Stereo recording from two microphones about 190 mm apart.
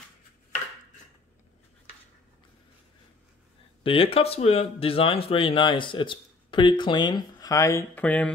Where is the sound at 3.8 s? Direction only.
30° left (ahead or behind); by 8.3 s 10° left (ahead or behind).